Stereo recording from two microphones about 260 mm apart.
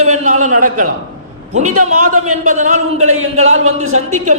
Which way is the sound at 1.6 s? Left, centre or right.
Right.